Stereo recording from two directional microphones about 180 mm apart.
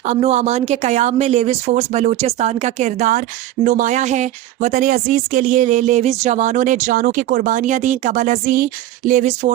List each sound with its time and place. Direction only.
0.0 s speech: 40° right (ahead or behind)